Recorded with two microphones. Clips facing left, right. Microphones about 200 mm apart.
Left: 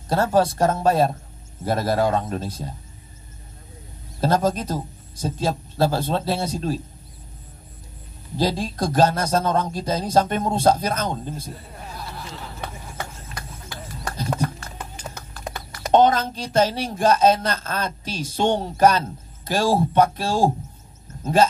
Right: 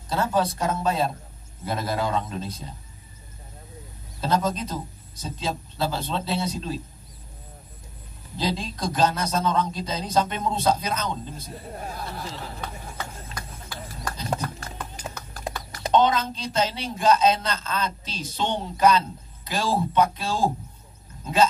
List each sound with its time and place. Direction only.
0.1 s a man's voice: 50° left (ahead or behind)
4.2 s a man's voice: 50° left (ahead or behind)
8.4 s a man's voice: 50° left (ahead or behind)
15.3 s a sound: 40° right (ahead or behind)
15.9 s a man's voice: 50° left (ahead or behind)